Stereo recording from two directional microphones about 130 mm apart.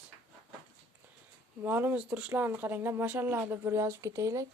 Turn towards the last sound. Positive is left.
turn(degrees=-25)  # may be behind; listen again after turning